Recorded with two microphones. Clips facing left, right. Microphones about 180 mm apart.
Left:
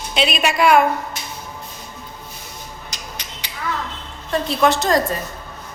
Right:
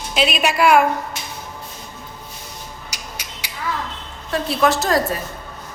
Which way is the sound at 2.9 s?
10° right (ahead or behind).